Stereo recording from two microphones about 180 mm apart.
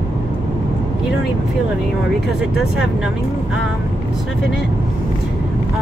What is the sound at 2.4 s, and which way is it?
Speech, 5° right (ahead or behind).